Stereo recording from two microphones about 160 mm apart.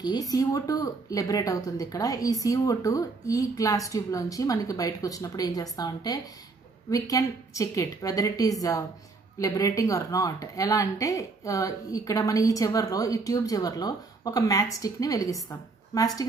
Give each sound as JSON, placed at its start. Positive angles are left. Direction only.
{"t": 0.0, "sound": "a woman's voice", "side_deg": 25}